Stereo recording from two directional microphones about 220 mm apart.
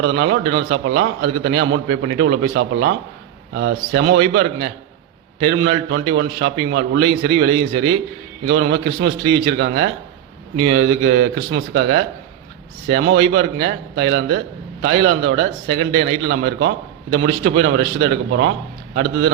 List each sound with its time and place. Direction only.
0.0 s a man's voice: 55° right (ahead or behind)